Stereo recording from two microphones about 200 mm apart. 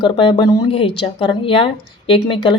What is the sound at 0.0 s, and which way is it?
Speech, 25° left (ahead or behind).